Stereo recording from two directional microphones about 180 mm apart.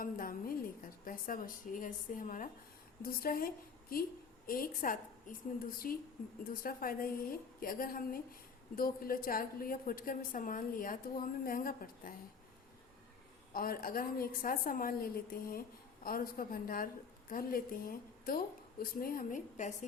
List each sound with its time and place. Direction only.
0.0 s a sound: 50° left (ahead or behind)
1.0 s a woman's voice: 50° left (ahead or behind)
13.5 s a woman's voice: 55° left (ahead or behind)